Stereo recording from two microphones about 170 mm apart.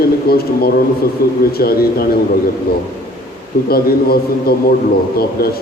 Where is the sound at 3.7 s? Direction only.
65° left (ahead or behind).